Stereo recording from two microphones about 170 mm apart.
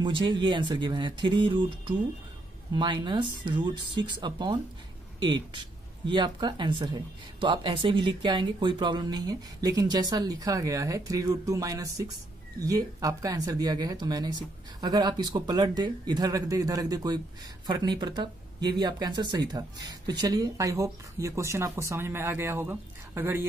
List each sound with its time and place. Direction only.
0.0 s speech: 25° right (ahead or behind)